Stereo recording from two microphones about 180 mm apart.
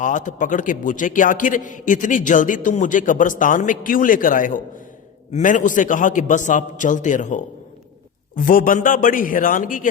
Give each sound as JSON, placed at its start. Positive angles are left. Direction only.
{"t": 0.0, "sound": "a man's voice", "side_deg": 45}